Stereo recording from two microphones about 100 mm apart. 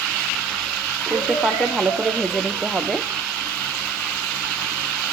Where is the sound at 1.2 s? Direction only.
Centre (ahead or behind).